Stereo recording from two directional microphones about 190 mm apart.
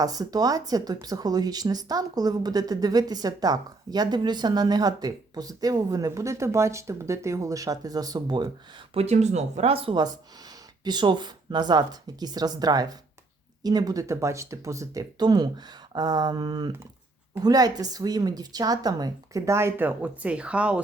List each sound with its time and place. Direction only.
0.0 s speech: 20° right (ahead or behind)
8.9 s speech: 35° right (ahead or behind); by 20.8 s 5° right (ahead or behind)